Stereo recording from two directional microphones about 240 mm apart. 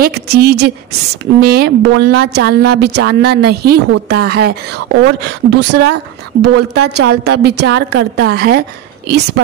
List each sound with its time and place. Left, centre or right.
0.0 s a woman's voice: right